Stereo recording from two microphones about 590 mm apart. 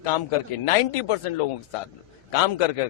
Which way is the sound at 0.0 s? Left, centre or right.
Left.